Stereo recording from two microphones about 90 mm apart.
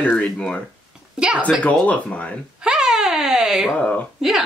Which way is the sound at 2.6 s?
5° right (ahead or behind).